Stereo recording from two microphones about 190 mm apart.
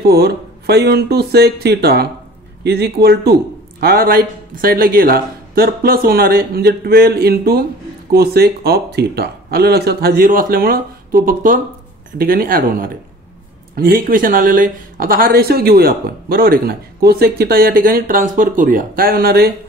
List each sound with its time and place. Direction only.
0.0 s speech: 60° right (ahead or behind)